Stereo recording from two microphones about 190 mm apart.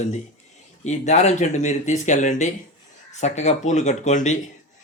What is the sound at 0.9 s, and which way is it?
Speech, 35° left (ahead or behind).